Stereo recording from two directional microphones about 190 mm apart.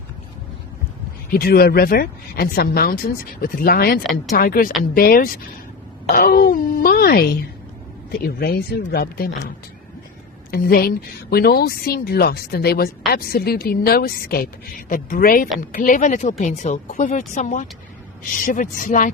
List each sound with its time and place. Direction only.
1.3 s speech: 50° left (ahead or behind)
10.5 s speech: 50° left (ahead or behind)